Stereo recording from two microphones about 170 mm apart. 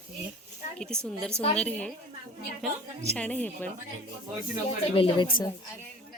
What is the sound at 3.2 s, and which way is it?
Speech, 10° left (ahead or behind).